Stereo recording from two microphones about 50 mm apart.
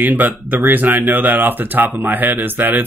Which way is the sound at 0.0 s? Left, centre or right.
Right.